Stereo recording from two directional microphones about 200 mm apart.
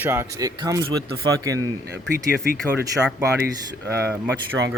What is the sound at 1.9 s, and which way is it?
Speech, 55° right (ahead or behind).